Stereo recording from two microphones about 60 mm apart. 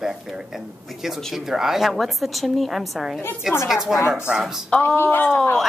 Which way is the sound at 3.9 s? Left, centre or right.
Left.